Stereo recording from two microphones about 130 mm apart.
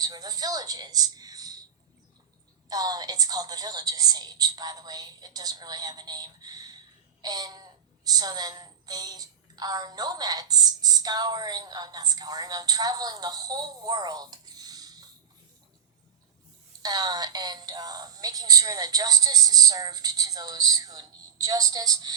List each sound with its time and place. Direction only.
0.0 s a woman's voice: 30° right (ahead or behind)
2.6 s a woman's voice: 30° right (ahead or behind)
16.8 s speech: 30° right (ahead or behind)